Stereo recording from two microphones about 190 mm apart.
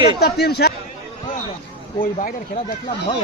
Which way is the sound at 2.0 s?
45° left (ahead or behind).